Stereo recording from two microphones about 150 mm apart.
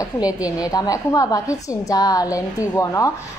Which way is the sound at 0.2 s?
25° left (ahead or behind).